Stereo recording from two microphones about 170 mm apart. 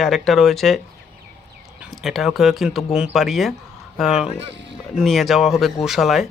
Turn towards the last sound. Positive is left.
turn(degrees=0)  # may be behind; listen again after turning